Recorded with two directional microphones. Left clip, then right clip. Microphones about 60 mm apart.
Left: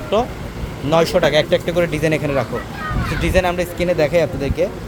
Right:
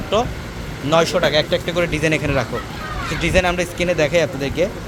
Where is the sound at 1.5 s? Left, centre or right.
Left.